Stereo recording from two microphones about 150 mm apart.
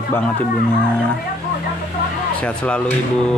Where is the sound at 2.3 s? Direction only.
10° left (ahead or behind).